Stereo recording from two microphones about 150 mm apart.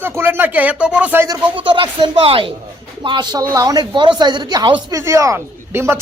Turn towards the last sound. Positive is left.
turn(degrees=-15)  # may be behind; listen again after turning